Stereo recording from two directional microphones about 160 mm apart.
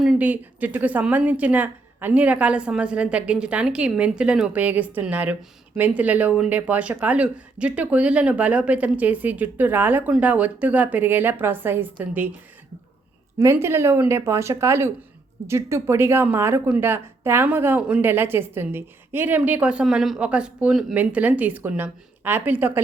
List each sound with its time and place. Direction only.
0.0 s a woman's voice: 5° right (ahead or behind)
13.4 s a woman's voice: 15° right (ahead or behind)